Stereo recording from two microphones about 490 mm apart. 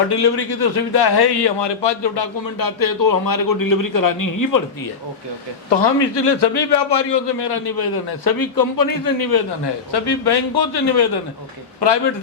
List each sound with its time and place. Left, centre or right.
0.1 s a man's voice: left
5.7 s a man's voice: left